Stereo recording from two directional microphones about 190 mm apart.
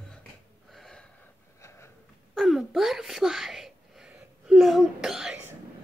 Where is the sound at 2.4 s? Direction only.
Centre (ahead or behind).